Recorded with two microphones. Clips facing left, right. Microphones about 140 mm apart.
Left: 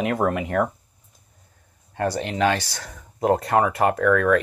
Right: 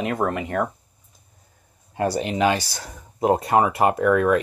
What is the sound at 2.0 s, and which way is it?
Speech, 10° right (ahead or behind).